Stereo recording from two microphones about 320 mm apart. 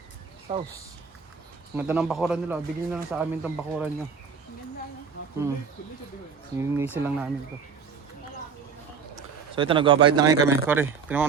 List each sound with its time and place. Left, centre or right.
0.5 s speech: centre
1.7 s a man's voice: centre
6.6 s speech: centre
9.1 s speech: centre